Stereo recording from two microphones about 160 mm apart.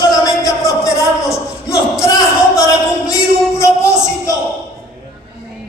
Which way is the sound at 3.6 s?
20° left (ahead or behind).